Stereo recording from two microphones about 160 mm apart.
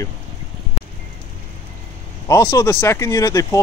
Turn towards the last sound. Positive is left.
turn(degrees=20)  # may be behind; listen again after turning